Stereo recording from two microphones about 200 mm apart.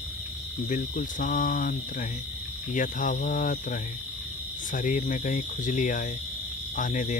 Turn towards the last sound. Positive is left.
turn(degrees=40)  # may be behind; listen again after turning